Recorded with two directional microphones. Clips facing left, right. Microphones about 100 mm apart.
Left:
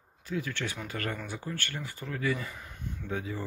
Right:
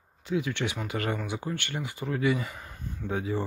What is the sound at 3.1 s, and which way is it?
Speech, 30° right (ahead or behind).